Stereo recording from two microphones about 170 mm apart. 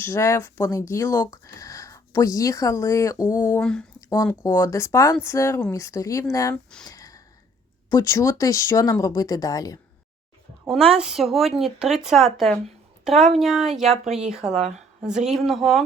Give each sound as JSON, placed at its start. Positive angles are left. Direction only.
{"t": 0.0, "sound": "speech", "side_deg": 15}
{"t": 3.6, "sound": "speech", "side_deg": 5}
{"t": 4.1, "sound": "speech", "side_deg": 20}
{"t": 6.8, "sound": "a sound", "side_deg": 20}
{"t": 7.9, "sound": "speech", "side_deg": 20}
{"t": 10.9, "sound": "speech", "side_deg": -5}